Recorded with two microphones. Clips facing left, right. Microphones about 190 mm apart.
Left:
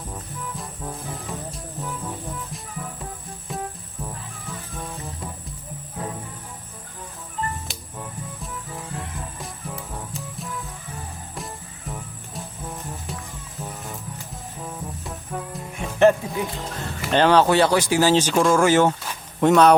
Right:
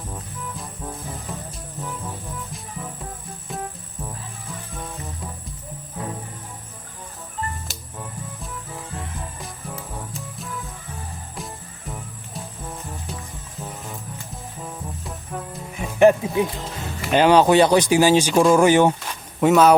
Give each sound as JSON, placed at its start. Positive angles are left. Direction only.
{"t": 15.3, "sound": "music", "side_deg": 0}
{"t": 17.1, "sound": "speech", "side_deg": -10}
{"t": 19.4, "sound": "speech", "side_deg": -5}